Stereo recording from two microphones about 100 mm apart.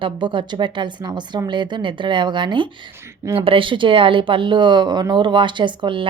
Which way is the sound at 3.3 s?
65° right (ahead or behind).